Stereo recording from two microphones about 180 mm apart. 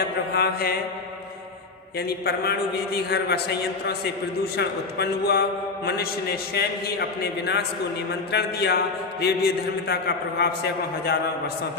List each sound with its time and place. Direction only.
0.3 s a man's voice: 60° left (ahead or behind)
2.0 s a man's voice: 60° left (ahead or behind)
4.5 s a man's voice: 65° left (ahead or behind)
7.2 s a man's voice: 65° left (ahead or behind)